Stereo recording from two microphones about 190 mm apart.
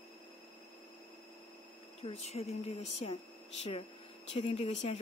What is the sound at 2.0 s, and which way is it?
Speech, 35° left (ahead or behind).